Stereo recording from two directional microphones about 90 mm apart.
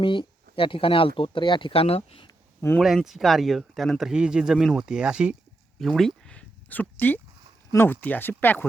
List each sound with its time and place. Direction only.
0.0 s speech: 70° left (ahead or behind); by 2.3 s 90° left
2.8 s speech: centre (ahead or behind)
5.8 s speech: centre (ahead or behind)
6.7 s speech: 20° left (ahead or behind)